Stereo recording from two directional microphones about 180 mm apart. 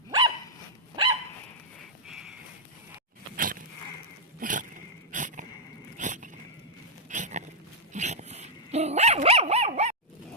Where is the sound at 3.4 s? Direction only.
50° right (ahead or behind).